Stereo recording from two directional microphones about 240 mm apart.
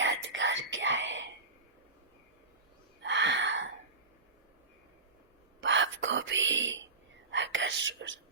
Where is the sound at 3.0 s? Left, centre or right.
Right.